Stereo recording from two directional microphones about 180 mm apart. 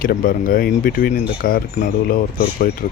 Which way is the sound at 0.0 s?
50° left (ahead or behind).